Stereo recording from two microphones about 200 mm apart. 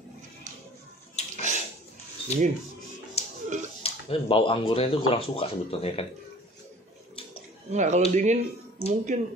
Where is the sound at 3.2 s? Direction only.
30° left (ahead or behind).